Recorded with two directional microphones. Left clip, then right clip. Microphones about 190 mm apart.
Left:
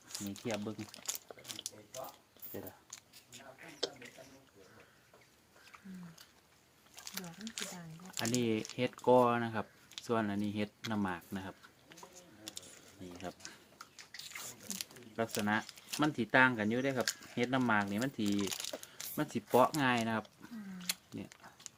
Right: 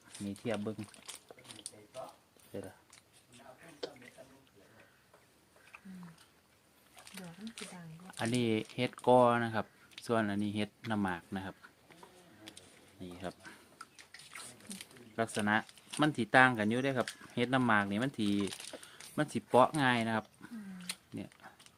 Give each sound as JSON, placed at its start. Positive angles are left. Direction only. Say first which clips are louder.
{"t": 0.5, "sound": "a sound", "louder": "right 2 dB", "side_deg": 25}
{"t": 3.8, "sound": "drip", "louder": "left 4 dB", "side_deg": 25}
{"t": 7.0, "sound": "speech", "louder": "left 3 dB", "side_deg": 25}
{"t": 8.2, "sound": "speech", "louder": "right 1 dB", "side_deg": -35}
{"t": 12.5, "sound": "a sound", "louder": "left 5 dB", "side_deg": 25}
{"t": 13.0, "sound": "speech", "louder": "right 2 dB", "side_deg": -40}
{"t": 15.1, "sound": "speech", "louder": "right 3 dB", "side_deg": -40}
{"t": 18.4, "sound": "typing", "louder": "left 2 dB", "side_deg": 25}
{"t": 18.9, "sound": "speech", "louder": "right 8 dB", "side_deg": -35}